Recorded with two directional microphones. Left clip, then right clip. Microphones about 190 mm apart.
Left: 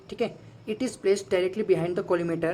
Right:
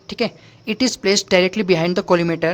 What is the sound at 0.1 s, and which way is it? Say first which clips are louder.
A woman's voice: right 7 dB; 30° right (ahead or behind).